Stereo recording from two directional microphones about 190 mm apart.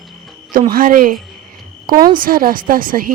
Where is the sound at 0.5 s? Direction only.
45° right (ahead or behind).